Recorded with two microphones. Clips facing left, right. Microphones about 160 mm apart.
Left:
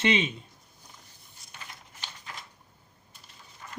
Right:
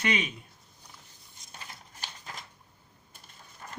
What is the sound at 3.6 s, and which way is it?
Run, 45° right (ahead or behind).